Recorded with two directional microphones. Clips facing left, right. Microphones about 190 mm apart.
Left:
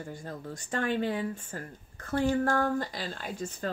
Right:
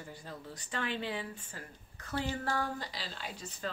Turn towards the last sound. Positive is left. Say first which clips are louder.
# left 6 dB
turn(degrees=50)  # may be behind; listen again after turning